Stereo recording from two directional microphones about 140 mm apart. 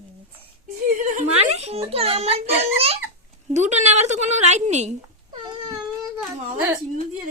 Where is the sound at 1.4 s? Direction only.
50° right (ahead or behind).